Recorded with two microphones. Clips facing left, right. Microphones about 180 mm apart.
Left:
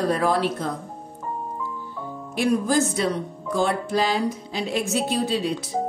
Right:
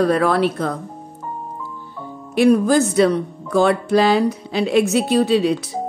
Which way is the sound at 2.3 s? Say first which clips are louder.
Right 7 dB; 70° right (ahead or behind).